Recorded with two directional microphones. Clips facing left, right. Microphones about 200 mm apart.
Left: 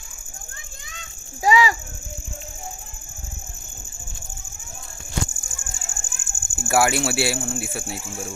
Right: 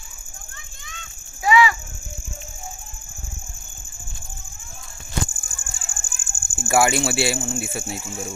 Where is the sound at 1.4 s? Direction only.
35° left (ahead or behind).